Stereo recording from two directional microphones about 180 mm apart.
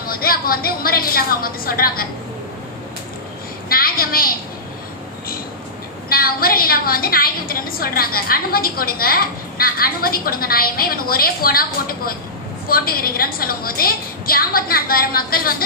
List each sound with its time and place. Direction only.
0.0 s a woman's voice: 55° left (ahead or behind)
3.7 s a sound: 55° left (ahead or behind)
6.1 s a woman's voice: 55° left (ahead or behind)